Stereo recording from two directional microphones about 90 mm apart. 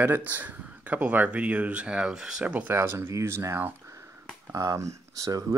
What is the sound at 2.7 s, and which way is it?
Speech, 30° right (ahead or behind).